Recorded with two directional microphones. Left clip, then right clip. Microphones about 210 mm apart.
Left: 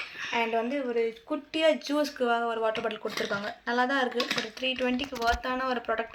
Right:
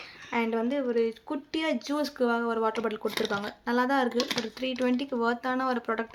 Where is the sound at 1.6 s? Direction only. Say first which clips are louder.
Left 5 dB; 50° right (ahead or behind).